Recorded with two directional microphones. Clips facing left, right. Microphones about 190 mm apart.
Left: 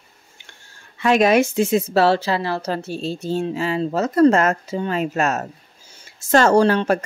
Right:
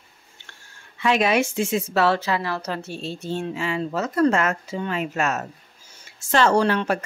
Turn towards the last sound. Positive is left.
turn(degrees=35)  # may be behind; listen again after turning